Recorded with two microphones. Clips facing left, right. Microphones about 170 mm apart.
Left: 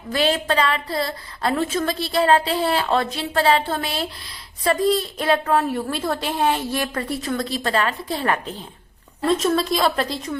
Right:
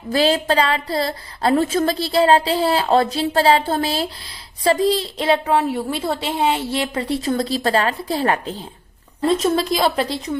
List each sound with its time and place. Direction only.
0.1 s a woman's voice: 35° right (ahead or behind)
5.5 s a woman's voice: 10° right (ahead or behind)
7.1 s a woman's voice: 30° right (ahead or behind)